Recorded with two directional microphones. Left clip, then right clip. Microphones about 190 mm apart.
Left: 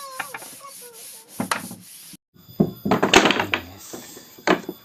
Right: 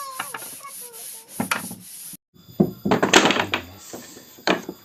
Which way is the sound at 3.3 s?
5° right (ahead or behind).